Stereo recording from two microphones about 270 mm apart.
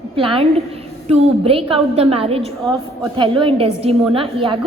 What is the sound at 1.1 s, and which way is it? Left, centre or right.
A woman's voice, right.